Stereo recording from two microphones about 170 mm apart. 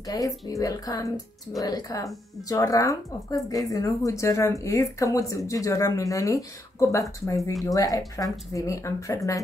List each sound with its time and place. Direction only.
0.0 s speech: 20° left (ahead or behind)